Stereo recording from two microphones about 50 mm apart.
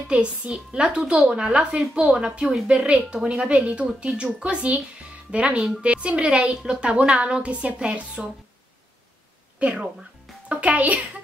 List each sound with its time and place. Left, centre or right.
0.1 s a woman's voice: right
8.2 s speech: centre
9.6 s a child's voice: right